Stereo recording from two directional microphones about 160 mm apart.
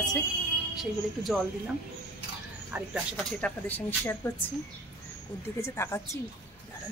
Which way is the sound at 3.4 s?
10° left (ahead or behind).